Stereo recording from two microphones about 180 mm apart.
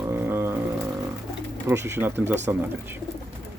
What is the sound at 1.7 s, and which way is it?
Speech, 15° right (ahead or behind).